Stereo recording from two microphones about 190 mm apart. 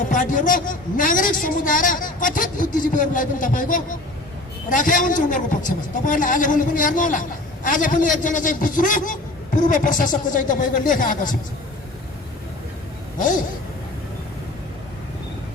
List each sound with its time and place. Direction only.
0.0 s a man's voice: 45° left (ahead or behind)
13.1 s speech: 45° left (ahead or behind)